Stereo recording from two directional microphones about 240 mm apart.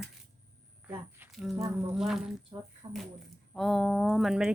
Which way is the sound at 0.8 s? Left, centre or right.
Centre.